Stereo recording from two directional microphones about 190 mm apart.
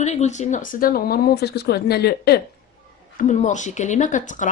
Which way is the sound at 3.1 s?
40° left (ahead or behind).